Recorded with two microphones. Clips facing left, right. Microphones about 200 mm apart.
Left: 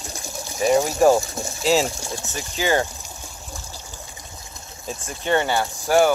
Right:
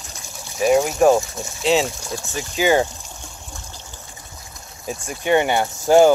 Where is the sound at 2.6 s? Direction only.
15° right (ahead or behind).